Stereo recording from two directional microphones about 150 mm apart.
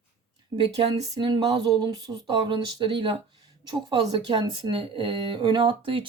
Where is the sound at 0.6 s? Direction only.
40° right (ahead or behind).